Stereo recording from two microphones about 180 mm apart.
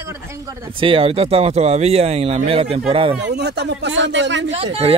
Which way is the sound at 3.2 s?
70° right (ahead or behind).